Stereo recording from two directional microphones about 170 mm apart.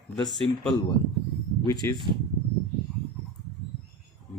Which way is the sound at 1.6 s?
20° left (ahead or behind).